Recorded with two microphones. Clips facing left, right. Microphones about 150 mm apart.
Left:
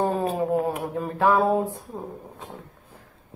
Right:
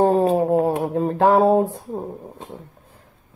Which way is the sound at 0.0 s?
30° right (ahead or behind).